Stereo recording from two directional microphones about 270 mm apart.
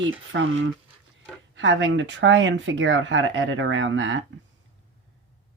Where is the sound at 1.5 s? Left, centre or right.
Right.